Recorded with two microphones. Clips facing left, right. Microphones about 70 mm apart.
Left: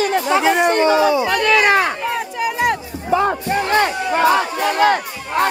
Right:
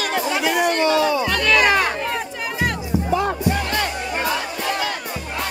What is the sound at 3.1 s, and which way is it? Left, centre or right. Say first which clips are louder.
Battle cry: left 5 dB; left.